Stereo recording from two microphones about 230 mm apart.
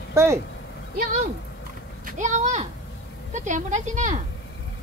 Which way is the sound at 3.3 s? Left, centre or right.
Right.